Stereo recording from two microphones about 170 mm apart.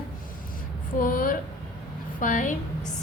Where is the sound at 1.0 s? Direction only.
55° left (ahead or behind).